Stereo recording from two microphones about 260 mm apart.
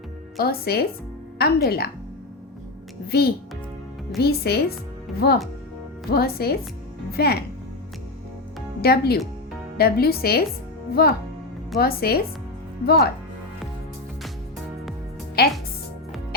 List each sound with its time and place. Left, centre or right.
0.3 s a woman's voice: left
3.1 s a woman's voice: left
8.8 s a woman's voice: left